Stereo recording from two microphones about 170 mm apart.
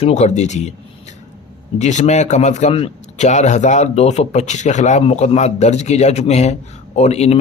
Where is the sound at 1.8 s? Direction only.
45° left (ahead or behind).